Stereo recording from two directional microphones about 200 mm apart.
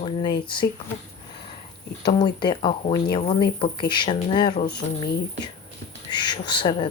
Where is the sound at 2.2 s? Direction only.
20° left (ahead or behind).